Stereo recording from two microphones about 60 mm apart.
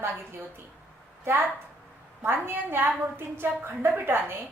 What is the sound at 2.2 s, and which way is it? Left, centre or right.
A woman's voice, right.